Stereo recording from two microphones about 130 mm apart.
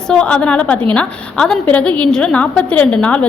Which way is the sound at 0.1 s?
5° left (ahead or behind).